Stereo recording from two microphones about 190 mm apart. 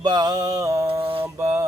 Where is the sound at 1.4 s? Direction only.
15° right (ahead or behind).